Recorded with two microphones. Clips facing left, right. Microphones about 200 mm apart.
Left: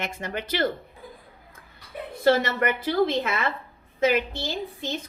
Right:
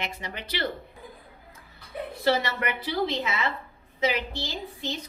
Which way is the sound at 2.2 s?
50° left (ahead or behind).